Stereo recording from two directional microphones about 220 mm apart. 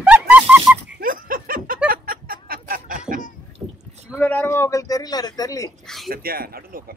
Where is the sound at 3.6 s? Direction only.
15° right (ahead or behind).